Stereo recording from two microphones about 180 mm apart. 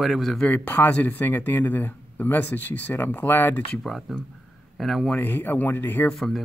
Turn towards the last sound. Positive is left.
turn(degrees=0)  # may be behind; listen again after turning